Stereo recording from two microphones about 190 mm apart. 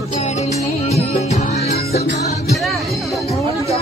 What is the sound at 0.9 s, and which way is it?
Music, 35° left (ahead or behind).